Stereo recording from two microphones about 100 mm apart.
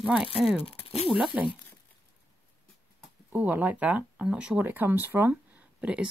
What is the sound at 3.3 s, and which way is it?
Speech, 15° right (ahead or behind).